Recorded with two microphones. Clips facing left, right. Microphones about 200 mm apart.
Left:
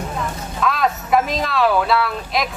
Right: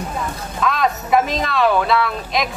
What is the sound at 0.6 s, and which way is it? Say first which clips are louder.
Speech: even; centre (ahead or behind).